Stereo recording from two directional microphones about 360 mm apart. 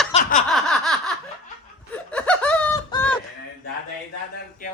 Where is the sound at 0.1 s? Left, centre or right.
Centre.